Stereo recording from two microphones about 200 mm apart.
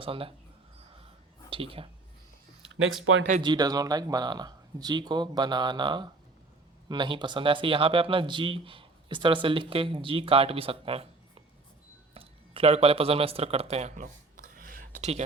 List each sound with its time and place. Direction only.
0.0 s speech: 25° right (ahead or behind)
1.5 s a woman's voice: 25° right (ahead or behind)
2.8 s speech: 70° right (ahead or behind)
3.4 s speech: 20° right (ahead or behind)
12.1 s a sound: 30° right (ahead or behind)